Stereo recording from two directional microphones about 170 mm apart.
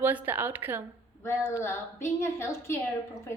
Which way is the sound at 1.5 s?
15° left (ahead or behind).